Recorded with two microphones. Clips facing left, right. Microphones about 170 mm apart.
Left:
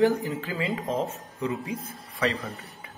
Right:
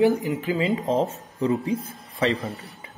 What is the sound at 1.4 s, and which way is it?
Speech, 35° right (ahead or behind).